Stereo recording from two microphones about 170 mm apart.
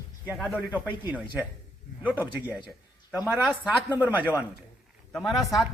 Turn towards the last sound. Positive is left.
turn(degrees=0)  # may be behind; listen again after turning